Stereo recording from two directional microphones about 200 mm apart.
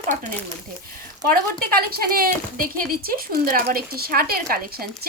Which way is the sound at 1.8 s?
50° right (ahead or behind).